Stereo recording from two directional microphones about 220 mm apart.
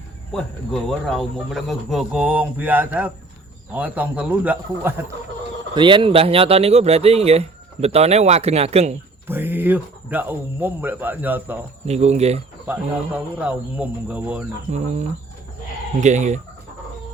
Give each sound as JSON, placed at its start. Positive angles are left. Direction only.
{"t": 0.3, "sound": "speech", "side_deg": 0}
{"t": 5.7, "sound": "speech", "side_deg": -20}
{"t": 9.2, "sound": "speech", "side_deg": -10}
{"t": 11.9, "sound": "speech", "side_deg": -30}
{"t": 12.6, "sound": "speech", "side_deg": -5}
{"t": 14.7, "sound": "speech", "side_deg": -35}